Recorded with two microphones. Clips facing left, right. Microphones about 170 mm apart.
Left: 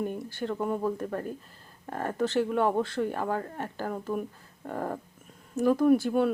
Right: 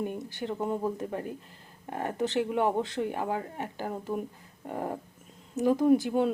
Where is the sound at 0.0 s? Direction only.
15° right (ahead or behind).